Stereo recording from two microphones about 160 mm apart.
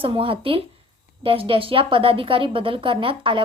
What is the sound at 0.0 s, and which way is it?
A woman's voice, 35° right (ahead or behind).